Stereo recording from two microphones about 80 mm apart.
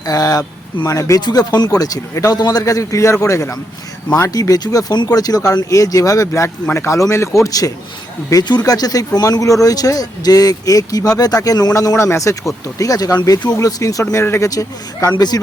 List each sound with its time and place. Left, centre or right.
0.0 s speech: left
1.2 s speech: left
1.7 s a man's voice: left
4.3 s a man's voice: left
7.4 s speech: left
8.3 s speech: left
11.7 s a man's voice: left
14.0 s a man's voice: left